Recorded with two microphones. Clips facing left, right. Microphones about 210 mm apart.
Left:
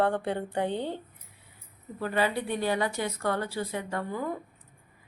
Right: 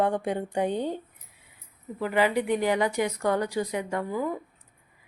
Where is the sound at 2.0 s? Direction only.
15° right (ahead or behind).